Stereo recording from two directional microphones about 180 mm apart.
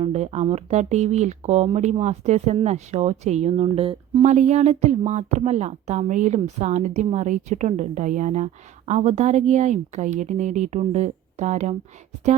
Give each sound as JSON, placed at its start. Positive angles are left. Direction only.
{"t": 0.0, "sound": "speech", "side_deg": -35}